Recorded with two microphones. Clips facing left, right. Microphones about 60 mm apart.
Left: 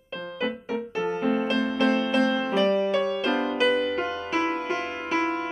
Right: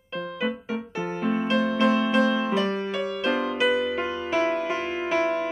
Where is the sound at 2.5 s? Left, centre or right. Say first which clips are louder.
Left 4 dB; centre.